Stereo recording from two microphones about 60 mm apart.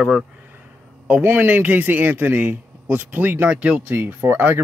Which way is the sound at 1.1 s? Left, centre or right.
Right.